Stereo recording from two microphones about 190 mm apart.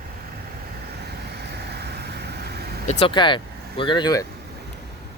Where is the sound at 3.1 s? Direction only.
25° left (ahead or behind).